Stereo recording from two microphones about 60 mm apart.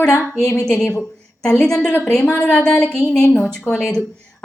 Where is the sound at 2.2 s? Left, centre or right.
Left.